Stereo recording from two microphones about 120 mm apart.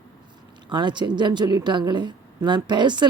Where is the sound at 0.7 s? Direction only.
40° right (ahead or behind).